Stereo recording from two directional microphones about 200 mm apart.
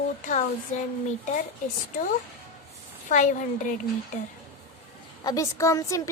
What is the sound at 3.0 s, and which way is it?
Speech, 40° left (ahead or behind).